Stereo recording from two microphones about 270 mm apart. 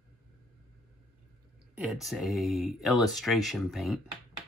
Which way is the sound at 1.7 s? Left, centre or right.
Centre.